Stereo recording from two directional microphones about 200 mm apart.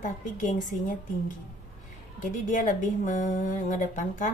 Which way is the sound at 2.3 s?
40° left (ahead or behind).